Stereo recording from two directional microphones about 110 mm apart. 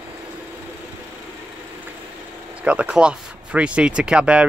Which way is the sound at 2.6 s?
10° right (ahead or behind).